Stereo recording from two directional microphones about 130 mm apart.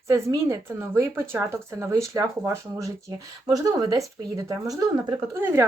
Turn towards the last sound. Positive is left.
turn(degrees=-15)  # may be behind; listen again after turning